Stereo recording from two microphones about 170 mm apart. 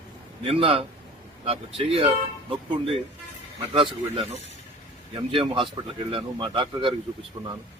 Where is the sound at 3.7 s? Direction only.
30° right (ahead or behind).